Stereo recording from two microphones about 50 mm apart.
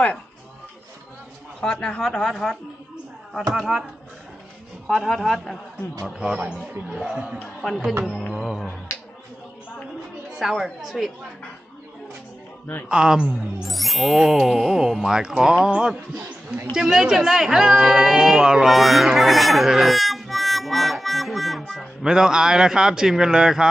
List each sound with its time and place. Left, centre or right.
1.6 s speech: centre
4.9 s speech: centre
6.1 s speech: centre
8.3 s speech: centre
8.9 s a sound: left
10.5 s speech: centre
12.9 s speech: centre
13.7 s speech: centre
18.7 s harmonica: centre
22.0 s speech: centre